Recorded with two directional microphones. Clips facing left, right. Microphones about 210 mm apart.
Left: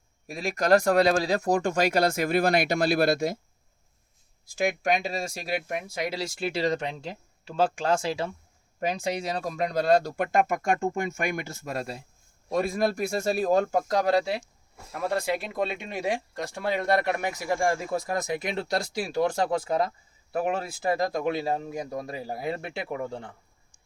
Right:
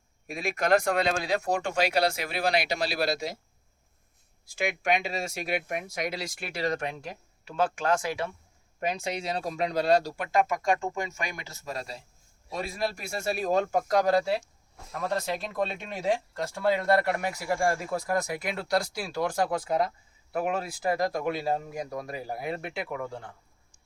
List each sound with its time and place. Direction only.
0.3 s speech: 40° left (ahead or behind)
4.5 s speech: 45° left (ahead or behind); by 8.3 s 25° left (ahead or behind)
8.8 s speech: 40° left (ahead or behind)
14.9 s speech: 10° left (ahead or behind)